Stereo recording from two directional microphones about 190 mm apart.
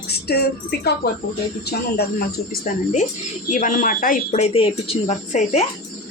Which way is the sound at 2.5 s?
45° left (ahead or behind).